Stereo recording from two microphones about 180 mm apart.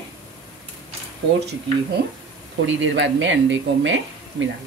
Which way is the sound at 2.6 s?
90° right.